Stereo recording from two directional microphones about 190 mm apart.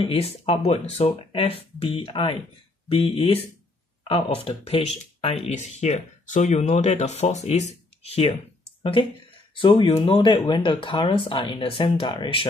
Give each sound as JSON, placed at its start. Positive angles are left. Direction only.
{"t": 0.0, "sound": "speech", "side_deg": 30}
{"t": 9.6, "sound": "speech", "side_deg": 25}